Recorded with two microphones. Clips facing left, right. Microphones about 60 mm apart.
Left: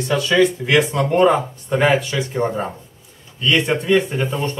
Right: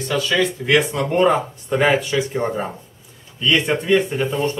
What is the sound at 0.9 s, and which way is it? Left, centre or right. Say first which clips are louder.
Speech: left 2 dB; centre.